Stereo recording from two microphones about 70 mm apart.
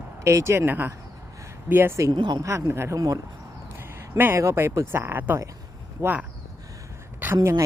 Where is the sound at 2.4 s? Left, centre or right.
Right.